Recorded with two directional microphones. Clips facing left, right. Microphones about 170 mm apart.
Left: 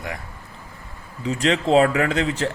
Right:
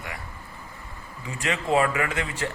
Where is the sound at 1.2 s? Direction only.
80° left.